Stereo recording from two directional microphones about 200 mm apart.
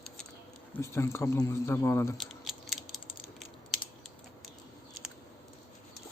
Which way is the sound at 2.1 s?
Centre (ahead or behind).